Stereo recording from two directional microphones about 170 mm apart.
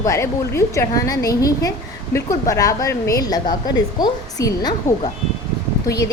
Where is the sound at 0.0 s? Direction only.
15° left (ahead or behind).